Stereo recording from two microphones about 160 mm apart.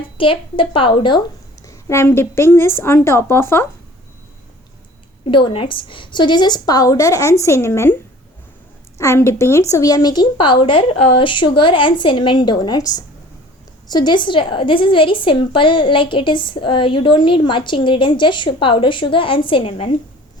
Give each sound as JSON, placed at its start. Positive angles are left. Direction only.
{"t": 0.2, "sound": "a woman's voice", "side_deg": 35}
{"t": 1.6, "sound": "a woman's voice", "side_deg": 15}
{"t": 5.2, "sound": "a woman's voice", "side_deg": 35}
{"t": 9.0, "sound": "a woman's voice", "side_deg": 15}